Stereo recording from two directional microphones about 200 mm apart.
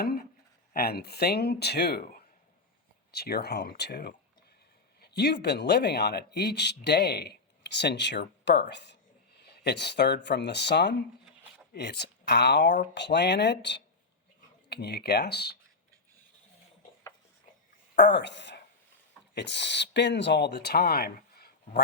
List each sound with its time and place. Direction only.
0.0 s speech: 50° left (ahead or behind)
17.9 s speech: 60° left (ahead or behind)